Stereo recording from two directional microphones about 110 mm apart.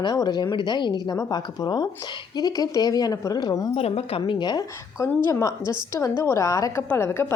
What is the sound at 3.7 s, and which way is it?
Speech, 65° left (ahead or behind).